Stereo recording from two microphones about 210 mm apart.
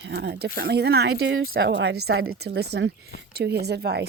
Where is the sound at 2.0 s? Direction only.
85° right.